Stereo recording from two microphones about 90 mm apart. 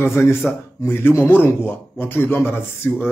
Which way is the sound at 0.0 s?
30° left (ahead or behind).